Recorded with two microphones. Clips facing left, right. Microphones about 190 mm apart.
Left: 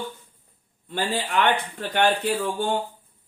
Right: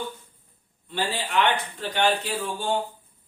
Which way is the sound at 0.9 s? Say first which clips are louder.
Left 2 dB; 50° left (ahead or behind).